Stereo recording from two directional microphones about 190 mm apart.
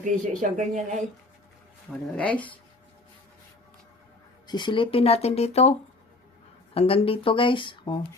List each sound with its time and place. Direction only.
0.0 s speech: 40° right (ahead or behind)
1.9 s speech: 5° left (ahead or behind)
4.4 s speech: 25° left (ahead or behind)
6.7 s speech: 30° left (ahead or behind)